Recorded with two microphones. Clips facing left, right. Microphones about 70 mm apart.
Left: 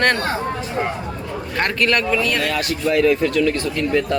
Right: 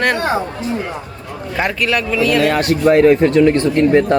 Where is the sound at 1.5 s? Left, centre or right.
Centre.